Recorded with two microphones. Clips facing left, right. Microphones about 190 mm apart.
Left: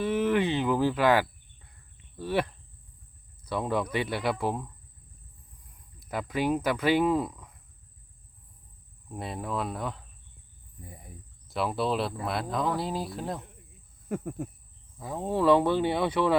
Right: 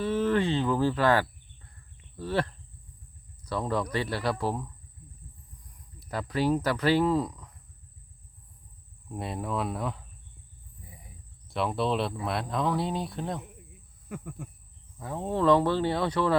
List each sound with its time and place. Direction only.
0.0 s speech: 15° left (ahead or behind)
3.5 s speech: 20° left (ahead or behind)
6.3 s speech: 15° left (ahead or behind)
9.0 s speech: centre (ahead or behind)
11.4 s speech: centre (ahead or behind)
14.1 s a sound: 40° left (ahead or behind)
14.9 s speech: 10° left (ahead or behind)